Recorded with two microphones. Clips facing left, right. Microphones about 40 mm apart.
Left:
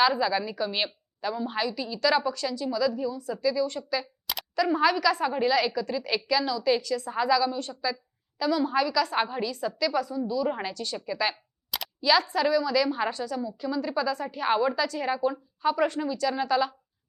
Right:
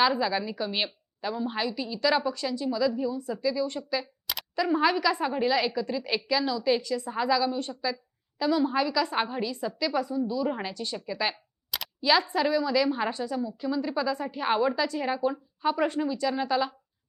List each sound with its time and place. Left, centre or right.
0.0 s a woman's voice: centre
4.3 s a sound: centre
4.8 s a woman's voice: right
9.1 s a woman's voice: centre
9.5 s a woman's voice: right
10.9 s speech: centre
11.7 s single-lens reflex camera: centre
12.0 s a woman's voice: right